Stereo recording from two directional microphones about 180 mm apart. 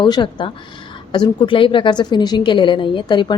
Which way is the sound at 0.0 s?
25° left (ahead or behind).